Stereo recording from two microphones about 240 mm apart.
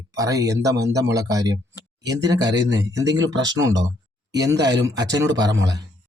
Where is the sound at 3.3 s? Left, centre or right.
Right.